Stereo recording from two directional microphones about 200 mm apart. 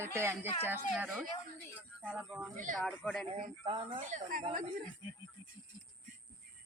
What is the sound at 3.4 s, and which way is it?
Speech, 25° right (ahead or behind).